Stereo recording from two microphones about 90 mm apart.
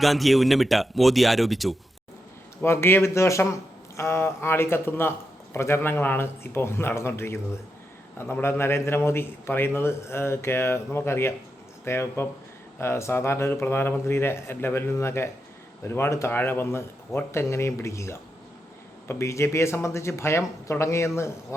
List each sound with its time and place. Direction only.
0.0 s speech: centre (ahead or behind)
2.6 s a man's voice: 30° left (ahead or behind)